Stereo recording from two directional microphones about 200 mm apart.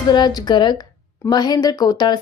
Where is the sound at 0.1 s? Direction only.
20° left (ahead or behind).